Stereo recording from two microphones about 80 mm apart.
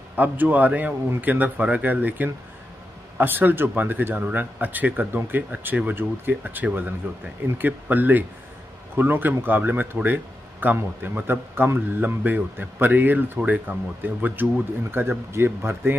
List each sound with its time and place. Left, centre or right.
0.1 s speech: right